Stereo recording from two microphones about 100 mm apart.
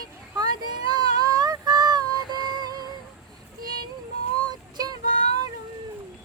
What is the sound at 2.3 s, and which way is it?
Music, 40° right (ahead or behind).